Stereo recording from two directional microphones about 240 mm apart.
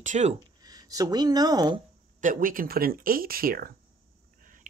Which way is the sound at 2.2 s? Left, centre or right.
Right.